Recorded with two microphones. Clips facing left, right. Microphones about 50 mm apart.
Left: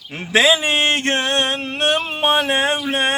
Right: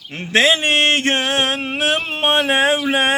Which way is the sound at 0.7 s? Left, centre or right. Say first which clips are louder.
Right 2 dB; right.